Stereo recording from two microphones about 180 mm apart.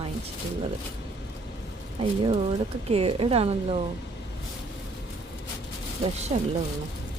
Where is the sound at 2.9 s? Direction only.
30° right (ahead or behind).